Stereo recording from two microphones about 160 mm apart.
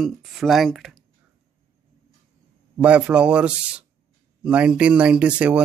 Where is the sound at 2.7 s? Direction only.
5° right (ahead or behind).